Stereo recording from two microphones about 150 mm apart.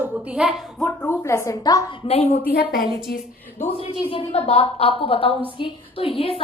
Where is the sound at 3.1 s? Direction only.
90° left.